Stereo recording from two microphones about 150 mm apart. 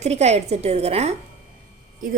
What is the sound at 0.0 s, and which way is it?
A woman's voice, 45° right (ahead or behind).